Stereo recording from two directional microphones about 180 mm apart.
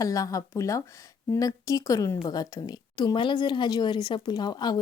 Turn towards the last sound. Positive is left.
turn(degrees=25)  # may be behind; listen again after turning